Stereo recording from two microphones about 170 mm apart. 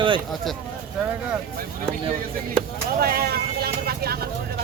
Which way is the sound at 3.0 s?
65° right (ahead or behind).